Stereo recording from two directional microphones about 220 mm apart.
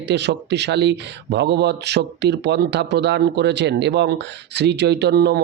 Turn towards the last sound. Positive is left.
turn(degrees=-50)  # may be behind; listen again after turning